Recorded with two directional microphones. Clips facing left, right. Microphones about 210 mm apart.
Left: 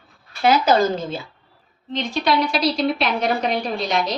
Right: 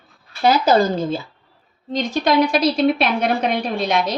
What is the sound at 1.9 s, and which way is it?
Speech, 45° right (ahead or behind).